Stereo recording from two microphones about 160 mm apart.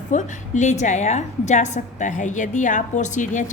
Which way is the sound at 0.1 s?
50° left (ahead or behind).